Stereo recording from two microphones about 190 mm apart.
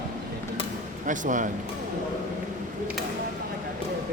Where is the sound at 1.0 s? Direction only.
40° right (ahead or behind).